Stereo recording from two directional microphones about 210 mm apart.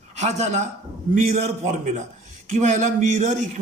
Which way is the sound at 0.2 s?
35° right (ahead or behind).